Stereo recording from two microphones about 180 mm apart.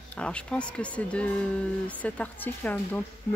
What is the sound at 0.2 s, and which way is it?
Speech, 5° left (ahead or behind).